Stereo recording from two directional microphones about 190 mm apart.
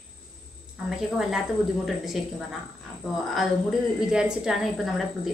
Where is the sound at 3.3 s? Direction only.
Centre (ahead or behind).